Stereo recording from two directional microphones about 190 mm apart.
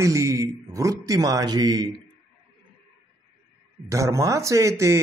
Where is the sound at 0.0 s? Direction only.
15° right (ahead or behind).